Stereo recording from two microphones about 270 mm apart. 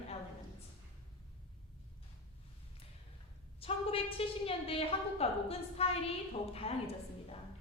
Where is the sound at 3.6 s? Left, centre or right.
Left.